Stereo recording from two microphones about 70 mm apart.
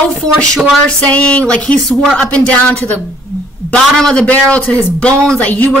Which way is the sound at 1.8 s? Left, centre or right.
Centre.